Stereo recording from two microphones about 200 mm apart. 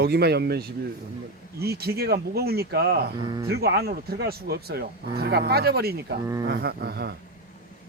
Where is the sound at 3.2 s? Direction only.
20° right (ahead or behind).